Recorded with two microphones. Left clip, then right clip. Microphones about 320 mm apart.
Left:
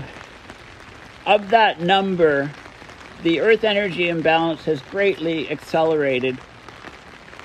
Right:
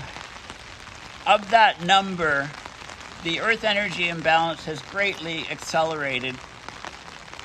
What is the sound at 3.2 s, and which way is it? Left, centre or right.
Speech, right.